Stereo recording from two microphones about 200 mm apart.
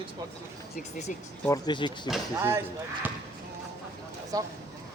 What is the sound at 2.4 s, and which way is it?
Speech, 15° right (ahead or behind).